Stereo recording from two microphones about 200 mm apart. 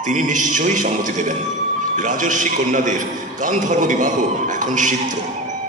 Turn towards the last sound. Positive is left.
turn(degrees=-40)  # may be behind; listen again after turning